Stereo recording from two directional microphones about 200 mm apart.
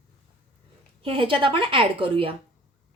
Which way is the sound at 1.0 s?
25° right (ahead or behind).